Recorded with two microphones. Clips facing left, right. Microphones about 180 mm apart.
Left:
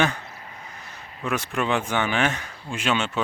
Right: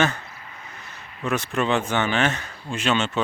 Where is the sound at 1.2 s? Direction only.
10° left (ahead or behind).